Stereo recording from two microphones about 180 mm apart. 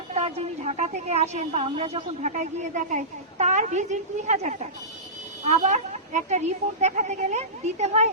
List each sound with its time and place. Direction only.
0.1 s a woman's voice: 35° right (ahead or behind)